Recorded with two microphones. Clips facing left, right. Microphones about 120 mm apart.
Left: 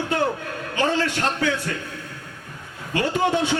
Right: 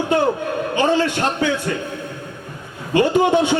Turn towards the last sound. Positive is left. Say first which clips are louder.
# right 6 dB
turn(degrees=-20)  # may be behind; listen again after turning